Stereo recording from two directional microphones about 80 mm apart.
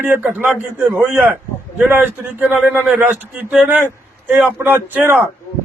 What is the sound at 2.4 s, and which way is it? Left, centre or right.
A man's voice, centre.